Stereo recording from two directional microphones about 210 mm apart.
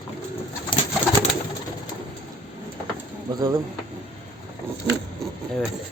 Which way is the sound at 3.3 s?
20° right (ahead or behind).